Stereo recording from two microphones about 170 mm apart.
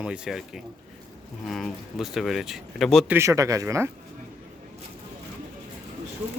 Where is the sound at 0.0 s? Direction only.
5° right (ahead or behind).